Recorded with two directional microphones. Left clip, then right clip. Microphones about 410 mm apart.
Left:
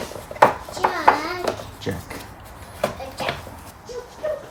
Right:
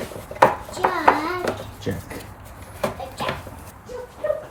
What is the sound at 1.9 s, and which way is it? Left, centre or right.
Speech, centre.